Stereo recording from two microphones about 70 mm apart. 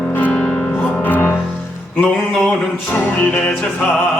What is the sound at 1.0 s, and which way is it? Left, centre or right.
Music, left.